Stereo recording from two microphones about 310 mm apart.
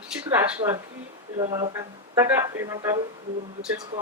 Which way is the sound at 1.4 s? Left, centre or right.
Centre.